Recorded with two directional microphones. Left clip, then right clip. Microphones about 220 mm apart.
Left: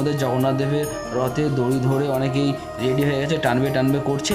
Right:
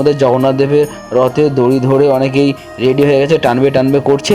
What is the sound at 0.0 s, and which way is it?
Speech, 25° right (ahead or behind).